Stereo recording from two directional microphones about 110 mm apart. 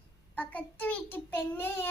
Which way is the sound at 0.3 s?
15° left (ahead or behind).